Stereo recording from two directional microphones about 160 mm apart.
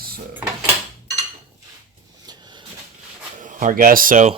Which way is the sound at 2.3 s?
25° right (ahead or behind).